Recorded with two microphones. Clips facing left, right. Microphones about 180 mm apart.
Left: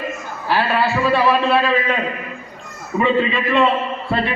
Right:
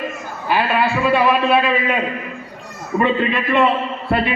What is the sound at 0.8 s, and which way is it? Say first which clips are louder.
A man's voice: right 1 dB; 15° right (ahead or behind).